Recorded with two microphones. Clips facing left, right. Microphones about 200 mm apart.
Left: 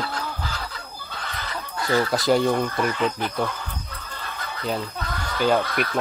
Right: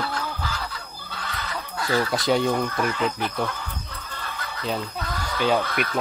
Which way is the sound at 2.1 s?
Centre (ahead or behind).